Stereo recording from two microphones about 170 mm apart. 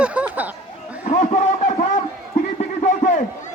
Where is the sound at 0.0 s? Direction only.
5° right (ahead or behind).